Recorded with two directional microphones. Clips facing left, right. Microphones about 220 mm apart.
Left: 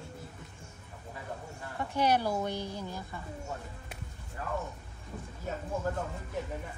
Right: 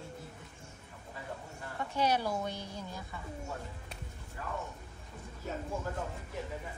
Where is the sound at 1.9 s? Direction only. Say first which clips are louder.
Left 3 dB; 15° left (ahead or behind).